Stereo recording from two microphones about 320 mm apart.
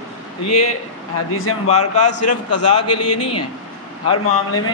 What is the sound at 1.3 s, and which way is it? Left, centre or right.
Speech, left.